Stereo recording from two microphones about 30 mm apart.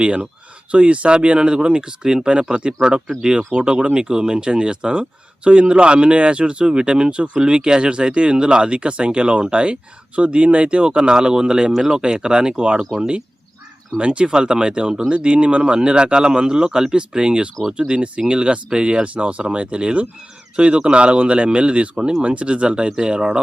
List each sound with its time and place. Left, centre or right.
0.7 s speech: right
3.5 s speech: right
3.9 s speech: right
14.1 s speech: right
15.1 s speech: right
15.7 s speech: right
19.0 s speech: right
21.9 s speech: right
22.2 s speech: right
22.9 s speech: right